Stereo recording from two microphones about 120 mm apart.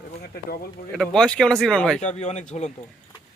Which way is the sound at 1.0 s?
10° left (ahead or behind).